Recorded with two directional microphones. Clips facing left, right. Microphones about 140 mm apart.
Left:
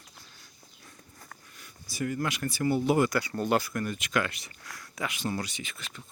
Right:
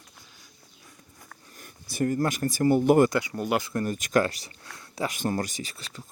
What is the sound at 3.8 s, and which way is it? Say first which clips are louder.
Speech: right 6 dB; 40° right (ahead or behind).